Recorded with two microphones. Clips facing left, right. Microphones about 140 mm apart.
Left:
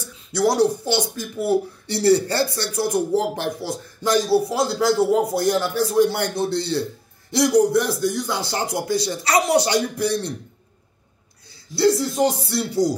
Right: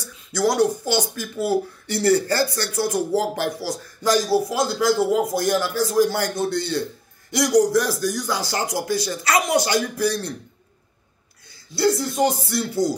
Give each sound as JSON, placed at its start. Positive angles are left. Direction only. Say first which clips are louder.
{"t": 0.0, "sound": "speech", "louder": "left 1 dB", "side_deg": 25}
{"t": 11.7, "sound": "speech", "louder": "left 2 dB", "side_deg": 25}